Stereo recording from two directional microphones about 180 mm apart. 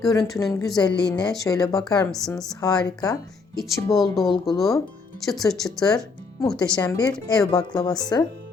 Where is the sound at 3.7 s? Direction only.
Centre (ahead or behind).